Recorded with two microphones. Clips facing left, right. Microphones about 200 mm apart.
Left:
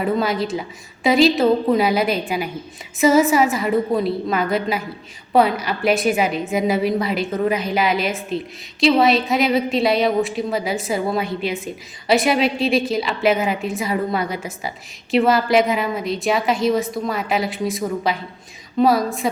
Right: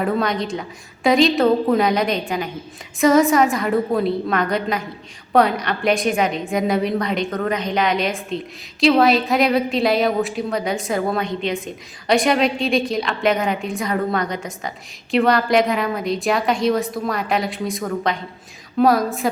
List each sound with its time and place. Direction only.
0.0 s a woman's voice: 5° left (ahead or behind)